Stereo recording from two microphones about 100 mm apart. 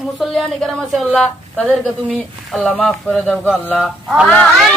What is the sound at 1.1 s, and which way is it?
Speech, 15° left (ahead or behind).